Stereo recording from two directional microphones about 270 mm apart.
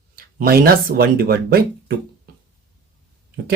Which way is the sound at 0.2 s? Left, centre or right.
Right.